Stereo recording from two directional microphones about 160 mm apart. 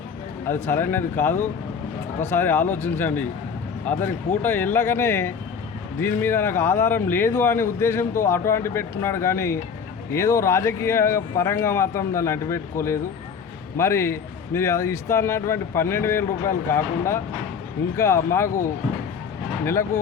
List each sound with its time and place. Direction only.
0.4 s speech: 15° left (ahead or behind)